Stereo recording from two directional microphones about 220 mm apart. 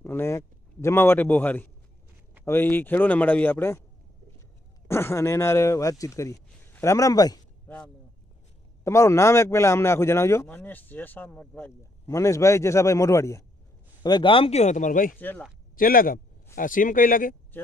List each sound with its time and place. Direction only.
0.0 s a sound: 10° left (ahead or behind)
2.4 s a man's voice: 10° left (ahead or behind)
4.8 s speech: 10° left (ahead or behind)
8.8 s a man's voice: 10° left (ahead or behind); by 15.1 s 35° left (ahead or behind)
15.1 s a man's voice: 10° left (ahead or behind)
15.7 s speech: 40° left (ahead or behind)